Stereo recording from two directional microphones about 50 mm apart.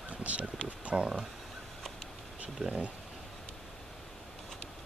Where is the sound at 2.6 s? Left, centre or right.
Right.